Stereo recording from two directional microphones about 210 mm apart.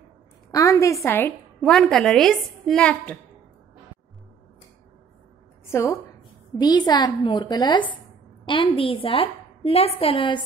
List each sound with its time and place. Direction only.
0.5 s a sound: 15° left (ahead or behind)
1.0 s a woman's voice: 10° left (ahead or behind)
5.7 s a woman's voice: 15° left (ahead or behind)